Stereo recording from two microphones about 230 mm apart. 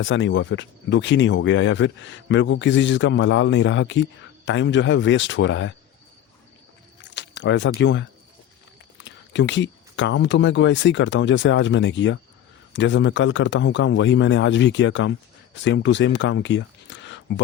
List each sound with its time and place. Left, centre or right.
0.0 s speech: left
7.0 s a sound: left
9.0 s speech: left